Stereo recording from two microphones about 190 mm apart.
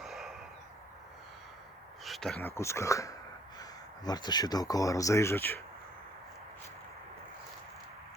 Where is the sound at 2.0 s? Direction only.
Centre (ahead or behind).